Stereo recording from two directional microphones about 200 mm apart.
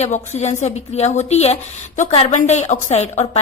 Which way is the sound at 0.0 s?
35° left (ahead or behind).